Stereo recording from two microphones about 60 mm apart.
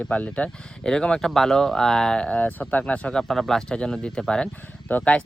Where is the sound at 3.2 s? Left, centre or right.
Centre.